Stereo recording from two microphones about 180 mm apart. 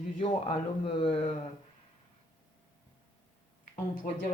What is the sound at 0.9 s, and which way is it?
Speech, 30° left (ahead or behind).